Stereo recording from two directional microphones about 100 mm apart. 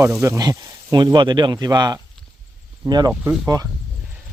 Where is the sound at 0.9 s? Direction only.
45° right (ahead or behind).